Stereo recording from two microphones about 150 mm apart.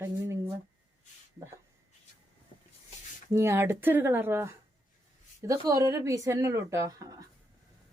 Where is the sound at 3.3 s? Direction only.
15° right (ahead or behind).